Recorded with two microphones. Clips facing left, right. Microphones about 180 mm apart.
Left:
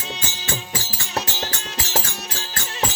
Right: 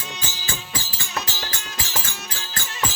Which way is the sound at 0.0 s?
25° left (ahead or behind).